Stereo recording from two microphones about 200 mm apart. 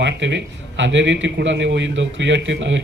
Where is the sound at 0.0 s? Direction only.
60° right (ahead or behind).